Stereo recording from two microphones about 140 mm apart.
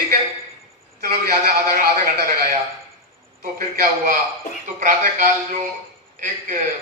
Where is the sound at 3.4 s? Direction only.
75° right (ahead or behind).